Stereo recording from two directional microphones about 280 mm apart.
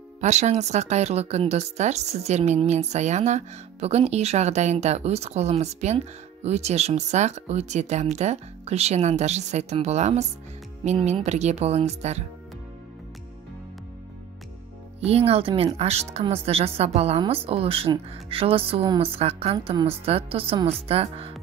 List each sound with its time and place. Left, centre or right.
0.2 s speech: right
15.0 s speech: right